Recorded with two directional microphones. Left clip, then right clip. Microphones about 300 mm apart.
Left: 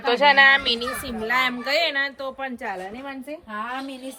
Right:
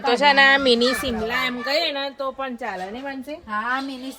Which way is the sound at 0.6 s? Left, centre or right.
Right.